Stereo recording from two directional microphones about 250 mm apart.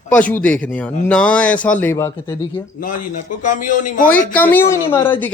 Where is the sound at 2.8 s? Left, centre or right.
Left.